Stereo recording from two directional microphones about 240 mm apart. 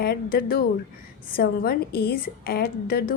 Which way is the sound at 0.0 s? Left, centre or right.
Left.